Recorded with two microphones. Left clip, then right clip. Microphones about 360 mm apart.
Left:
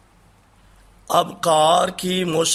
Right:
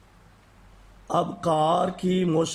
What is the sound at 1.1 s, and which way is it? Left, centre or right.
Speech, left.